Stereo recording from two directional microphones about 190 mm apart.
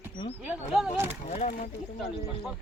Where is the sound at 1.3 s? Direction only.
35° left (ahead or behind).